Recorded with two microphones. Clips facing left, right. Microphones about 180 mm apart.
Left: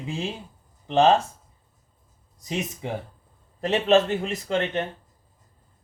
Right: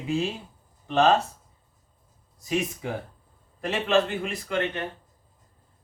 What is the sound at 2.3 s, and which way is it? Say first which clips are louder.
Speech: right 3 dB; 20° left (ahead or behind).